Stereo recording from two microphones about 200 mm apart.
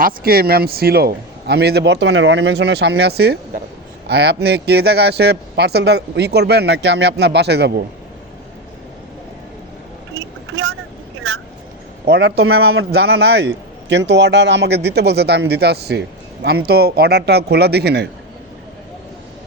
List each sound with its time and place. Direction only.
0.0 s a man's voice: 50° right (ahead or behind)
10.5 s vehicle: 90° right
12.0 s a man's voice: 55° right (ahead or behind)